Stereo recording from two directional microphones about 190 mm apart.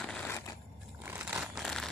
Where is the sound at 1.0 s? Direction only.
10° right (ahead or behind).